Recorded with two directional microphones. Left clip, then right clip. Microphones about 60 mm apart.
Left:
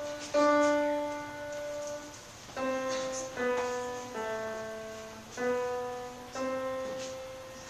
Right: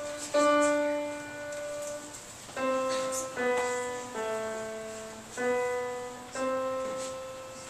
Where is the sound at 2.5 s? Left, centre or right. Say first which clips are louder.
Right 3 dB; centre.